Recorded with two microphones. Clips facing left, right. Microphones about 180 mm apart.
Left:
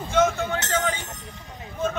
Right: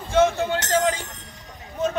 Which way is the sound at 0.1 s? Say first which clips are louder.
Right 3 dB; 30° right (ahead or behind).